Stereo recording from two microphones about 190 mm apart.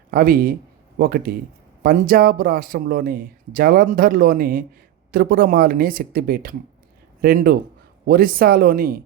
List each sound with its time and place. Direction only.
0.1 s speech: 50° right (ahead or behind)